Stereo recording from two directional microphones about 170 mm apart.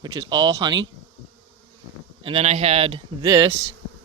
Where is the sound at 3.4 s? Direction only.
20° right (ahead or behind).